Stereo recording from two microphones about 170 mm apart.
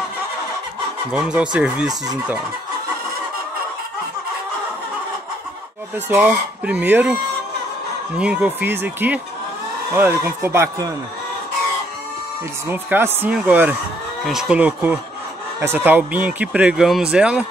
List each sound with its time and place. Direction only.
1.1 s speech: 5° right (ahead or behind)
6.0 s speech: 10° right (ahead or behind)
8.2 s speech: 5° right (ahead or behind)
10.4 s speech: 15° right (ahead or behind)
12.6 s speech: 15° right (ahead or behind)